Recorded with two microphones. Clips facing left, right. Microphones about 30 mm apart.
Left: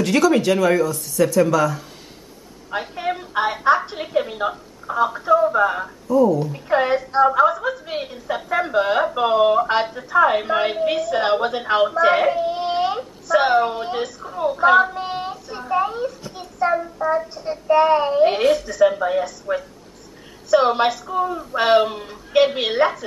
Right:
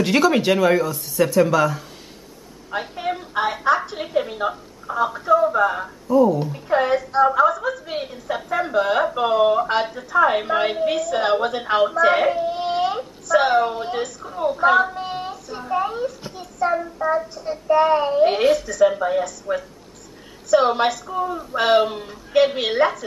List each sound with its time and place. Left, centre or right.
0.0 s speech: centre
2.7 s a sound: centre
3.9 s a woman's voice: centre
6.0 s speech: centre
6.5 s a woman's voice: centre
12.5 s a sound: centre
15.6 s a woman's voice: centre
17.3 s a woman's voice: left
19.5 s speech: left
20.5 s a woman's voice: centre